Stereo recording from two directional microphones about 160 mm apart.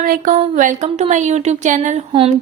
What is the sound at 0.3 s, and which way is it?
A woman's voice, 50° right (ahead or behind).